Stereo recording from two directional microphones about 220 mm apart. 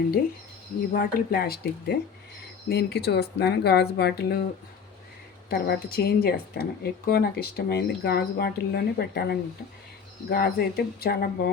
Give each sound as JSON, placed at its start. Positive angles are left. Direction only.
{"t": 0.9, "sound": "a woman's voice", "side_deg": 45}
{"t": 5.5, "sound": "a woman's voice", "side_deg": 45}